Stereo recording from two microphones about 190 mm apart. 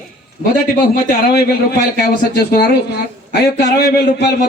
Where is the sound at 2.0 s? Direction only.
55° left (ahead or behind).